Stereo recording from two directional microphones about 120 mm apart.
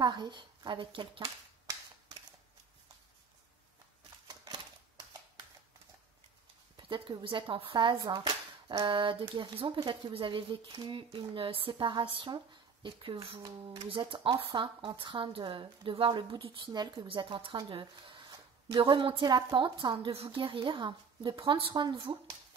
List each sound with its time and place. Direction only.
0.0 s speech: 35° right (ahead or behind)
6.8 s speech: 45° right (ahead or behind)
13.4 s speech: 35° right (ahead or behind)
13.8 s speech: 45° right (ahead or behind)